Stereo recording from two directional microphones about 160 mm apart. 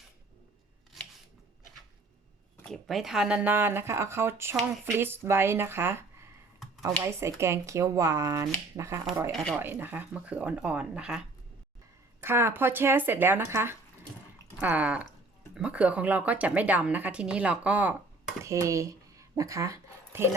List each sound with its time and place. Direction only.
2.6 s speech: 5° left (ahead or behind); by 9.0 s 20° right (ahead or behind)
9.3 s speech: centre (ahead or behind)
9.6 s speech: 15° right (ahead or behind)
12.2 s speech: 15° right (ahead or behind)
18.4 s speech: 20° right (ahead or behind)